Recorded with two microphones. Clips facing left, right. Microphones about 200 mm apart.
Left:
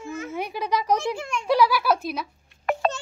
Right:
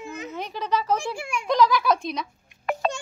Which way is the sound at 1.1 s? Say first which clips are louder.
Left 1 dB; 10° right (ahead or behind).